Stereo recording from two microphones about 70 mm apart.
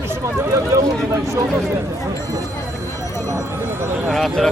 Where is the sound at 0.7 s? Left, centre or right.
Right.